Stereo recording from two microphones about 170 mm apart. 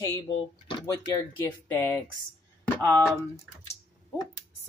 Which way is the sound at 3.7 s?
15° left (ahead or behind).